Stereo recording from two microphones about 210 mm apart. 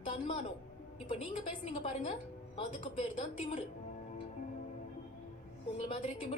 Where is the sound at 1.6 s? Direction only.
30° left (ahead or behind).